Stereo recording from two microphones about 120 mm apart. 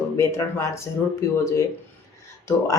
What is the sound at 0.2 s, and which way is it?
Speech, 25° left (ahead or behind).